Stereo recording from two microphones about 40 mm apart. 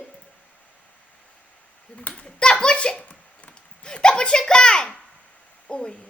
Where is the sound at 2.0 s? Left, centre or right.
Left.